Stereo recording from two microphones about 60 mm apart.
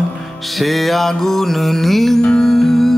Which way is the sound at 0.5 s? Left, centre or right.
Centre.